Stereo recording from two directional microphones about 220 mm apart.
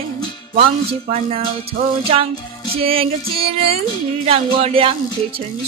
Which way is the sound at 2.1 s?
25° right (ahead or behind).